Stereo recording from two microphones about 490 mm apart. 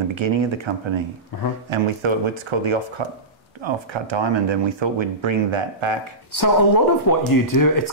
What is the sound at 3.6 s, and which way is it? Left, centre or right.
Speech, right.